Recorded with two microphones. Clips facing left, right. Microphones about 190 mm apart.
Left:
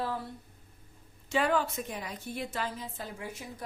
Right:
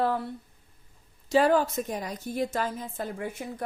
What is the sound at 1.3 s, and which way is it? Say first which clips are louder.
Speech: right 6 dB; 40° right (ahead or behind).